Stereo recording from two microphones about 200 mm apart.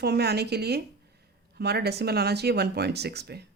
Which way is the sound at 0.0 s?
55° right (ahead or behind).